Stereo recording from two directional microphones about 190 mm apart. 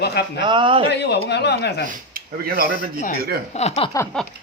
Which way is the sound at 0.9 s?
60° left (ahead or behind).